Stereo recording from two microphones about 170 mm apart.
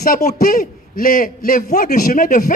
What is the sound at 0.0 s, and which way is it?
A man's voice, 60° left (ahead or behind).